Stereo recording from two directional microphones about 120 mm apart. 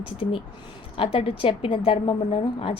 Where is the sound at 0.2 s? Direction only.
50° left (ahead or behind).